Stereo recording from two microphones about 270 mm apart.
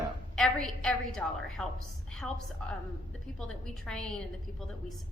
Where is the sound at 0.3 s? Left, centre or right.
Centre.